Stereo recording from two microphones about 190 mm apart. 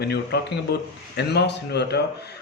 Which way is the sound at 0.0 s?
60° left (ahead or behind).